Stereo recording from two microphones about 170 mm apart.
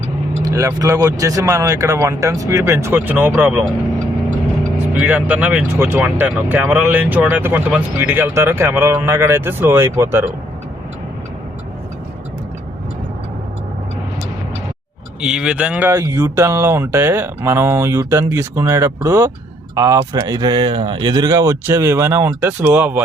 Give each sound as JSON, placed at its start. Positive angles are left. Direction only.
{"t": 0.4, "sound": "speech", "side_deg": -20}
{"t": 4.9, "sound": "speech", "side_deg": -10}
{"t": 15.2, "sound": "speech", "side_deg": -5}